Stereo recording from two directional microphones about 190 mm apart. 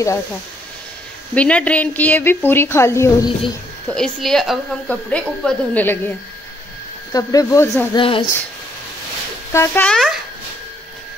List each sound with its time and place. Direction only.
1.3 s a woman's voice: 5° left (ahead or behind)
3.9 s a woman's voice: 5° left (ahead or behind)
8.0 s speech: 30° left (ahead or behind)
9.5 s a woman's voice: 10° left (ahead or behind)